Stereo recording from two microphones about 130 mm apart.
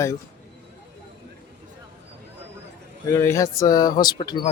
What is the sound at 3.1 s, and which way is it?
Speech, 25° left (ahead or behind).